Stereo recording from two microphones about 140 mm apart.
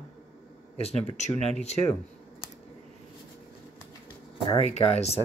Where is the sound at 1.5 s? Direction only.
50° left (ahead or behind).